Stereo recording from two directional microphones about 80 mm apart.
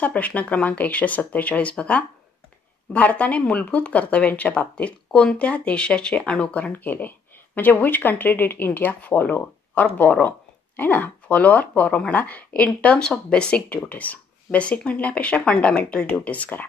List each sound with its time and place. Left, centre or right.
0.0 s a woman's voice: centre